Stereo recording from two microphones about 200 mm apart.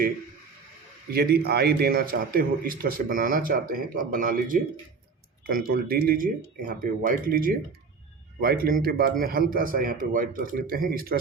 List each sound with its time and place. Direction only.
1.1 s a man's voice: 50° right (ahead or behind)